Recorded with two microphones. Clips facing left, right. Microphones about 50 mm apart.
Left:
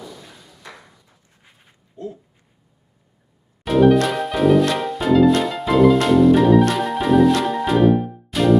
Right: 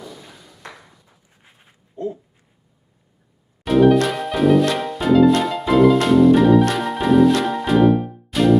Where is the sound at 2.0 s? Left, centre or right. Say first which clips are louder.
Right 5 dB; right.